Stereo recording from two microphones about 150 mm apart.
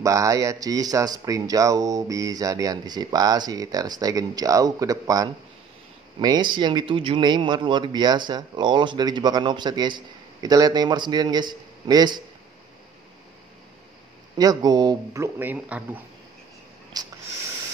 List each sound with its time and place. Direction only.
0.0 s a man's voice: 20° right (ahead or behind)
14.4 s a man's voice: 25° right (ahead or behind); by 16.0 s 10° right (ahead or behind)
17.0 s a sound: 25° right (ahead or behind)